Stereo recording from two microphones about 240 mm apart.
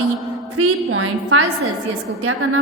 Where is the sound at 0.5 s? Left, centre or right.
Right.